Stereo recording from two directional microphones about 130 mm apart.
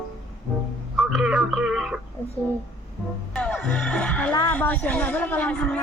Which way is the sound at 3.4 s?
5° left (ahead or behind).